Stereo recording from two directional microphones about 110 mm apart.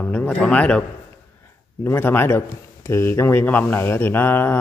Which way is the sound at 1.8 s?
20° left (ahead or behind).